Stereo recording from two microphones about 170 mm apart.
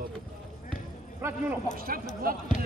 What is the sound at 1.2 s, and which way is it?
Speech, 15° right (ahead or behind).